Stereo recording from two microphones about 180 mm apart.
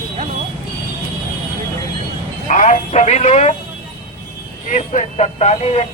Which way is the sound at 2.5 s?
45° left (ahead or behind).